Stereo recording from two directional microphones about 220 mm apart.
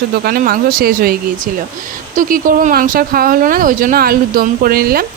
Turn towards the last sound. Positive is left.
turn(degrees=-45)  # may be behind; listen again after turning